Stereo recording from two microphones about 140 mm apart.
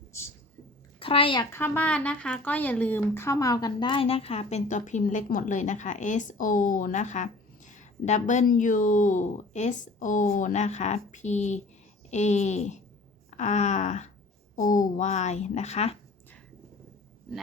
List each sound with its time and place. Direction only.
0.9 s a child's voice: 40° left (ahead or behind)
1.5 s speech: 15° left (ahead or behind); by 14.1 s 55° left (ahead or behind)
14.5 s speech: 70° left (ahead or behind); by 16.0 s 50° left (ahead or behind)